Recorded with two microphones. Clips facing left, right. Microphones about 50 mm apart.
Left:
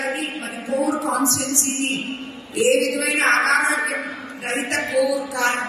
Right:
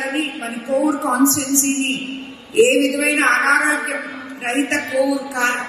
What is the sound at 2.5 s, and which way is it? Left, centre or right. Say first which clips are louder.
A man's voice: right 4 dB; right.